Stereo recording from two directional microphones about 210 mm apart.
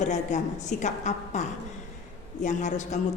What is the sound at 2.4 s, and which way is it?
Speech, 35° left (ahead or behind).